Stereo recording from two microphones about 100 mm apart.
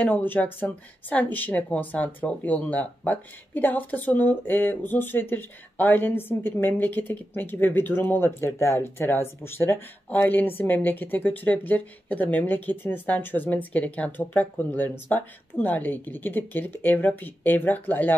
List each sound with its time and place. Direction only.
0.0 s speech: 15° left (ahead or behind)